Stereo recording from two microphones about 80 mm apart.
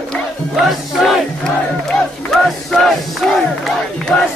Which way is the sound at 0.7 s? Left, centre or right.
Centre.